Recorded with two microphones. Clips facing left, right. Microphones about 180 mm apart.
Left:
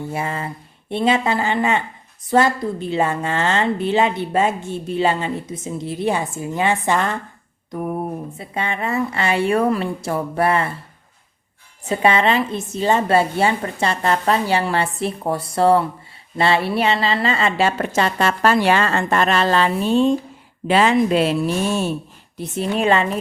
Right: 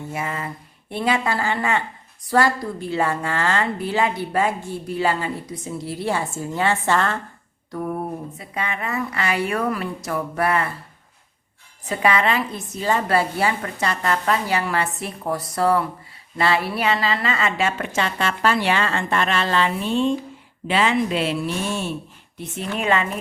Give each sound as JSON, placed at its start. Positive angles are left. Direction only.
{"t": 0.1, "sound": "a woman's voice", "side_deg": 30}
{"t": 7.7, "sound": "a sound", "side_deg": 15}
{"t": 8.4, "sound": "a woman's voice", "side_deg": 30}
{"t": 11.9, "sound": "a woman's voice", "side_deg": 25}